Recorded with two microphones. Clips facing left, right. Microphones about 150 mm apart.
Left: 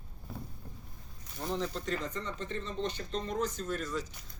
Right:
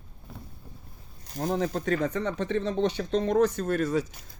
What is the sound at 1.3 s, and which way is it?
Speech, 50° right (ahead or behind).